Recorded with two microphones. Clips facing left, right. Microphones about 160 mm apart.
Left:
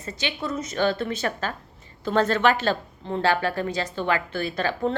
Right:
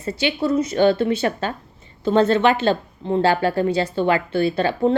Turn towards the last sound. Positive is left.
turn(degrees=-30)  # may be behind; listen again after turning